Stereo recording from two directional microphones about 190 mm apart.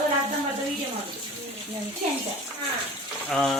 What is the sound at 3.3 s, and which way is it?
Speech, centre (ahead or behind).